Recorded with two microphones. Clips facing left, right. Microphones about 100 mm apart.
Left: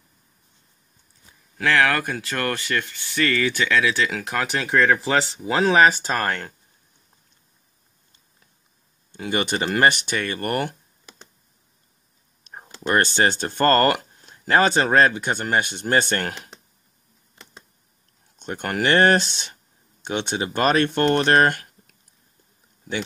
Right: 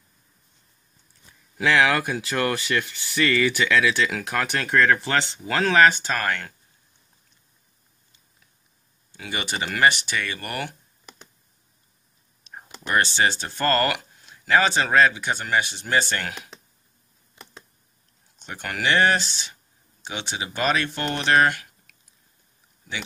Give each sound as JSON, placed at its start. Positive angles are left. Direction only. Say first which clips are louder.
{"t": 1.6, "sound": "speech", "louder": "even", "side_deg": -15}
{"t": 5.9, "sound": "speech", "louder": "left 2 dB", "side_deg": 35}
{"t": 9.1, "sound": "speech", "louder": "left 6 dB", "side_deg": 45}
{"t": 12.6, "sound": "speech", "louder": "left 2 dB", "side_deg": 45}
{"t": 18.4, "sound": "speech", "louder": "left 4 dB", "side_deg": 45}